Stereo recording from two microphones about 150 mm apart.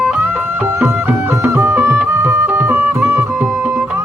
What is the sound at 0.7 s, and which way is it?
Music, 15° right (ahead or behind).